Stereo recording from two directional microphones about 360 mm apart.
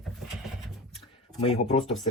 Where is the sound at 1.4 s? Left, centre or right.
Centre.